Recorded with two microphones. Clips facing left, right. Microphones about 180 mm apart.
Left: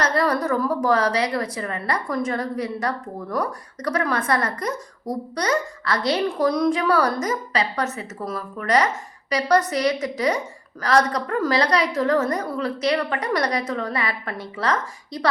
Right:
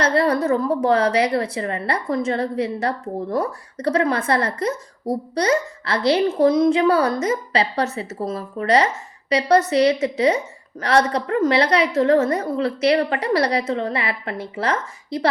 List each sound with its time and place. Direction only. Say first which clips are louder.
0.0 s a woman's voice: right 3 dB; 25° right (ahead or behind)